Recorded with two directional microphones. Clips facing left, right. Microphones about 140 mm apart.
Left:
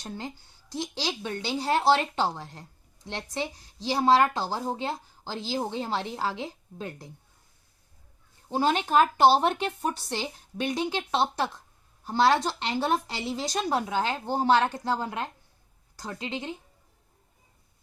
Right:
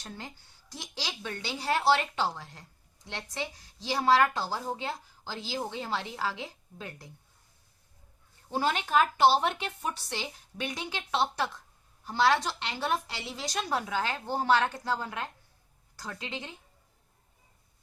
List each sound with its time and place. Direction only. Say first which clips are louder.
0.7 s a woman's voice: left 8 dB; 25° left (ahead or behind)
8.4 s a woman's voice: left 4 dB; 25° left (ahead or behind)